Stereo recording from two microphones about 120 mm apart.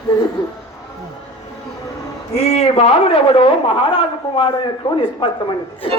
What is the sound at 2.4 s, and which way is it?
A man's voice, 65° left (ahead or behind).